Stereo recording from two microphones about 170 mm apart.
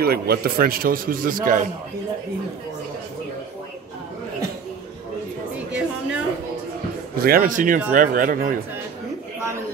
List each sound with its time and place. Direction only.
0.0 s a man's voice: 65° right (ahead or behind)
5.8 s a sound: 5° right (ahead or behind)
7.2 s speech: 60° right (ahead or behind)